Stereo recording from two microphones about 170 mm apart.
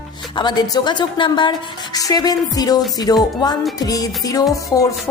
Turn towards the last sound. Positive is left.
turn(degrees=20)  # may be behind; listen again after turning